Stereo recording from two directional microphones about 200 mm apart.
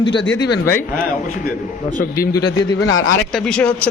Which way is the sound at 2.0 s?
45° left (ahead or behind).